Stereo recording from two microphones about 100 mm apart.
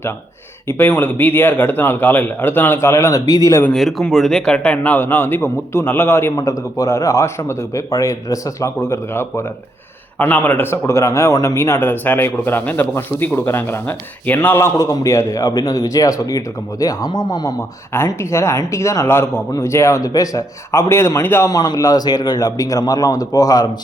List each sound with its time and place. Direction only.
0.7 s a man's voice: 20° left (ahead or behind); by 3.6 s 35° left (ahead or behind)
3.7 s a man's voice: centre (ahead or behind); by 17.5 s 45° left (ahead or behind)
17.9 s a man's voice: 25° left (ahead or behind)
21.5 s a man's voice: 40° left (ahead or behind)